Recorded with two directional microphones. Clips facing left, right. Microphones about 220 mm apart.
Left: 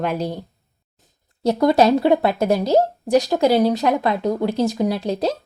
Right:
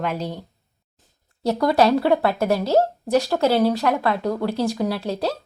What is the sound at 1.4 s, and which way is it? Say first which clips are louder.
A woman's voice: left 3 dB; 20° left (ahead or behind).